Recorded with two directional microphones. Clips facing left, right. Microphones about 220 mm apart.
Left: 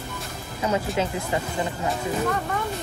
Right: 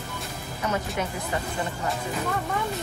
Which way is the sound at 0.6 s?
25° left (ahead or behind).